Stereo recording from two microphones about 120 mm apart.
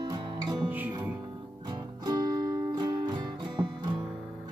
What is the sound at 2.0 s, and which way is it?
Music, 35° right (ahead or behind).